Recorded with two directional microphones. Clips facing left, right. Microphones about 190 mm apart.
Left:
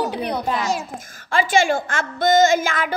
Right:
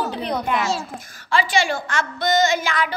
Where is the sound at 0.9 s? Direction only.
50° left (ahead or behind).